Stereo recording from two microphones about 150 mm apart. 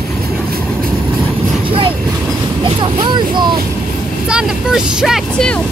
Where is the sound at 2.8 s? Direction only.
30° right (ahead or behind).